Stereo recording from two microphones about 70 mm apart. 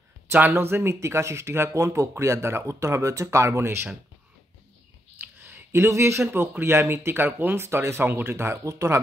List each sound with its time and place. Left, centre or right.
0.6 s speech: right
5.2 s a sound: right
6.6 s speech: right
8.6 s speech: right